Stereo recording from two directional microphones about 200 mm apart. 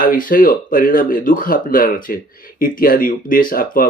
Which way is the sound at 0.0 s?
45° left (ahead or behind).